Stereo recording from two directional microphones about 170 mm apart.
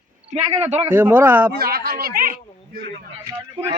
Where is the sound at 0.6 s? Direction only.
40° right (ahead or behind).